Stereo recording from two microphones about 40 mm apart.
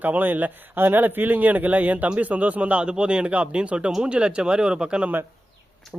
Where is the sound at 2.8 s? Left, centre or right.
Right.